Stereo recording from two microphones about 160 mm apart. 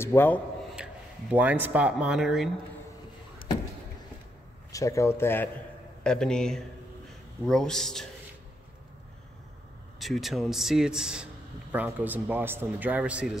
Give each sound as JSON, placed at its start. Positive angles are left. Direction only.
{"t": 0.0, "sound": "speech", "side_deg": 15}
{"t": 1.3, "sound": "speech", "side_deg": -10}
{"t": 4.7, "sound": "a man's voice", "side_deg": 20}
{"t": 9.9, "sound": "a man's voice", "side_deg": 0}